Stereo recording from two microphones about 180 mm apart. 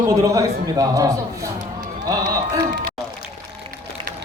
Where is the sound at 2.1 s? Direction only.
20° right (ahead or behind).